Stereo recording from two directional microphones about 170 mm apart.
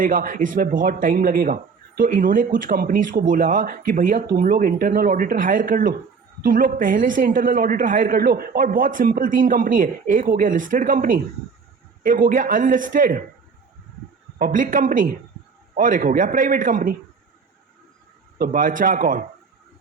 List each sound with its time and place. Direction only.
0.0 s a woman's voice: 55° right (ahead or behind)
14.3 s a woman's voice: 55° right (ahead or behind)
18.3 s a woman's voice: 55° right (ahead or behind)